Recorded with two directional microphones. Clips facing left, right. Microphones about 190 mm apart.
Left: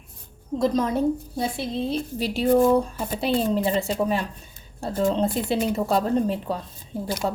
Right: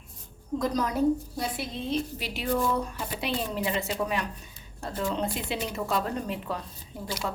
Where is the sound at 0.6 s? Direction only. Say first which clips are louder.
Left 4 dB; 25° left (ahead or behind).